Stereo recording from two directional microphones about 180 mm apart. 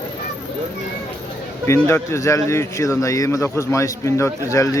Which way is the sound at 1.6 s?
15° left (ahead or behind).